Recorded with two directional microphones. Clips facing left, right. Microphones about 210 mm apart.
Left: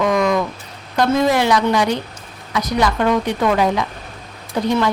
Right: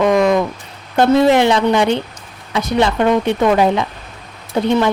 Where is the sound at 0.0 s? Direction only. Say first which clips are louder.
Right 4 dB; 25° right (ahead or behind).